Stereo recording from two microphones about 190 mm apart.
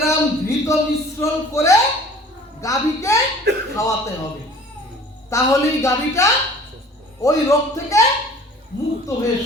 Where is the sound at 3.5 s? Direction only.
65° right (ahead or behind).